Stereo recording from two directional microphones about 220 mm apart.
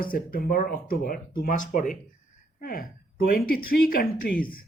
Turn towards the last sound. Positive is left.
turn(degrees=40)  # may be behind; listen again after turning